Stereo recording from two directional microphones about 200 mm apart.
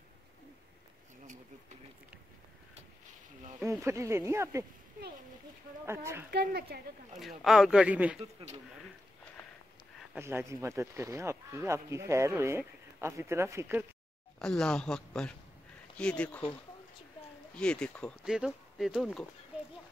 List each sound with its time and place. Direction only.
3.8 s speech: 15° right (ahead or behind)
5.9 s speech: 15° right (ahead or behind)
6.3 s a woman's voice: 50° right (ahead or behind)
7.2 s speech: centre (ahead or behind)
8.2 s speech: 30° right (ahead or behind)
10.1 s speech: 15° right (ahead or behind)
14.4 s speech: 5° left (ahead or behind)
17.6 s speech: 5° left (ahead or behind)
19.5 s clip-clop: 5° right (ahead or behind)